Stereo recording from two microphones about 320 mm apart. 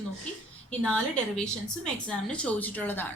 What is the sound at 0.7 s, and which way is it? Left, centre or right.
A woman's voice, centre.